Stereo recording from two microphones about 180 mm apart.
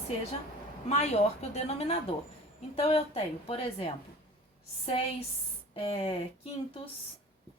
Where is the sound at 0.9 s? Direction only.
35° left (ahead or behind).